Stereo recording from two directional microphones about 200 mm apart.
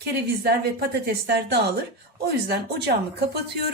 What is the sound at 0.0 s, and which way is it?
Speech, 55° right (ahead or behind).